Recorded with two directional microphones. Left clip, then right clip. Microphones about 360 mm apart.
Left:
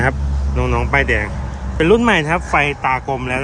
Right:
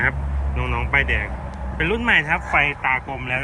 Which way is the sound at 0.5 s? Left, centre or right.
Centre.